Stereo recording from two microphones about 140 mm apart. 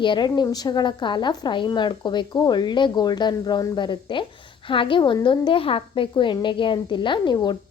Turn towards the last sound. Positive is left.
turn(degrees=30)  # may be behind; listen again after turning